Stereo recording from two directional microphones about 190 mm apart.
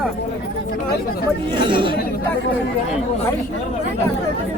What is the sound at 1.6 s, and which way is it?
Speech, 25° right (ahead or behind).